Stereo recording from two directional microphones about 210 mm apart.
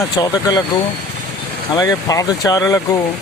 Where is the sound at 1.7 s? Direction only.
15° left (ahead or behind).